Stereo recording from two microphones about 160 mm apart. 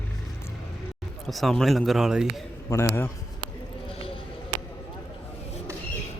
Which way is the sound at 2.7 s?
15° left (ahead or behind).